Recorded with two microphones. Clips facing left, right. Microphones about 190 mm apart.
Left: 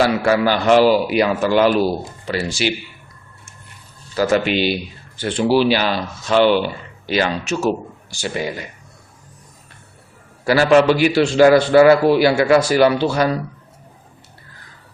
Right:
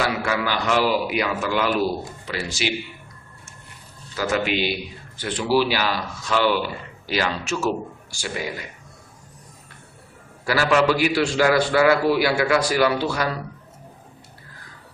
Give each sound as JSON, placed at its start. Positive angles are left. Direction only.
{"t": 0.0, "sound": "a man's voice", "side_deg": 35}
{"t": 4.1, "sound": "a man's voice", "side_deg": 35}
{"t": 10.4, "sound": "a man's voice", "side_deg": 25}